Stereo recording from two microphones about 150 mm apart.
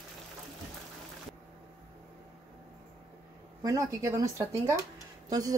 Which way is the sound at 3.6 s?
20° right (ahead or behind).